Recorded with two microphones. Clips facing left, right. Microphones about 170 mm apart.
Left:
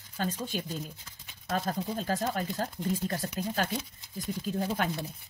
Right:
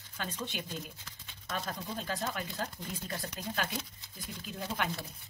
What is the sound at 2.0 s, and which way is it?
Speech, 40° left (ahead or behind).